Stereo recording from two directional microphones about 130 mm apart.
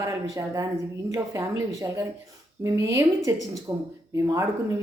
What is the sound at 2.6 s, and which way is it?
Speech, 20° right (ahead or behind).